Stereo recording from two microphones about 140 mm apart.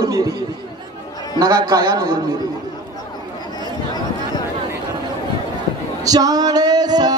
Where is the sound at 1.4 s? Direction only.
25° right (ahead or behind).